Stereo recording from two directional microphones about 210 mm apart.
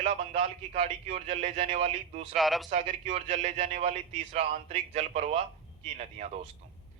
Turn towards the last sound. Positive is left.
turn(degrees=-30)  # may be behind; listen again after turning